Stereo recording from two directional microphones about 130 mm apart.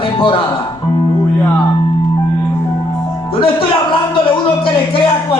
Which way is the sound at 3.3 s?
40° left (ahead or behind).